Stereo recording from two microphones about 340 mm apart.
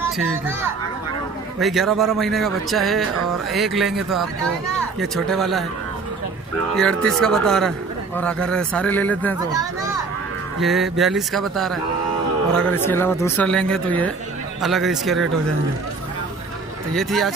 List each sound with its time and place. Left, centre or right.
1.6 s speech: centre
6.7 s speech: centre
10.6 s speech: centre
16.9 s speech: centre